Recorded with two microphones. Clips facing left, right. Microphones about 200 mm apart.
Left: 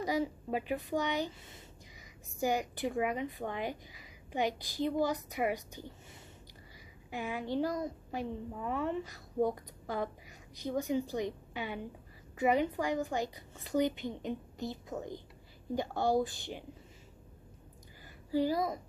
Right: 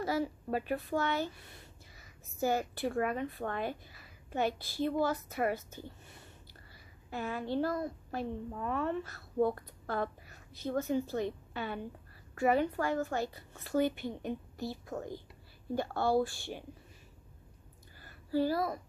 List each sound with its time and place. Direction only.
0.0 s speech: 15° left (ahead or behind)
7.1 s speech: 15° left (ahead or behind)
18.0 s a sound: 15° left (ahead or behind)